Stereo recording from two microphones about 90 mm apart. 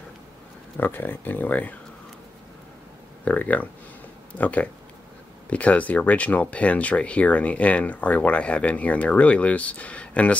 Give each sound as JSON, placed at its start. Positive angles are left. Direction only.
{"t": 0.7, "sound": "speech", "side_deg": 25}
{"t": 3.3, "sound": "speech", "side_deg": 15}